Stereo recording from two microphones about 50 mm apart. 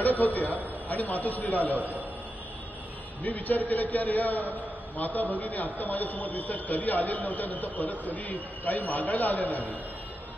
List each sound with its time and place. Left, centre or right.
0.0 s a man's voice: left
1.8 s a man's voice: right
3.3 s a man's voice: left